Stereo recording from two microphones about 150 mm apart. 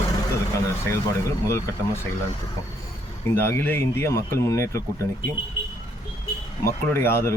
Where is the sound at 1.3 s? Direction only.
20° left (ahead or behind).